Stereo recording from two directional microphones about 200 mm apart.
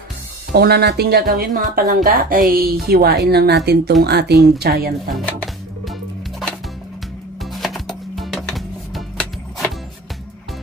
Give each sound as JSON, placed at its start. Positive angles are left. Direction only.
{"t": 0.5, "sound": "speech", "side_deg": -50}
{"t": 5.1, "sound": "music", "side_deg": 5}
{"t": 7.4, "sound": "music", "side_deg": 0}